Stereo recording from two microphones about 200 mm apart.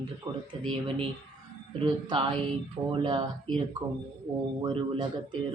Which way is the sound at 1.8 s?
25° right (ahead or behind).